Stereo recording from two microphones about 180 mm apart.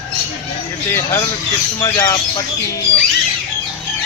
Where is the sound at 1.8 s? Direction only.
20° left (ahead or behind).